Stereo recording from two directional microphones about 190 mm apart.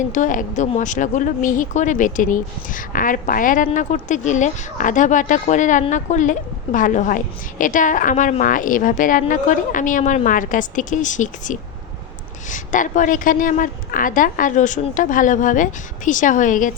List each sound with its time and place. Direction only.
0.1 s a woman's voice: 40° left (ahead or behind)